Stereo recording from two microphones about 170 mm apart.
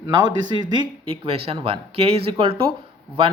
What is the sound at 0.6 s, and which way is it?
Speech, 25° right (ahead or behind).